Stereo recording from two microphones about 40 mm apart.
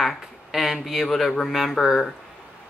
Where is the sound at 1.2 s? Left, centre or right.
Centre.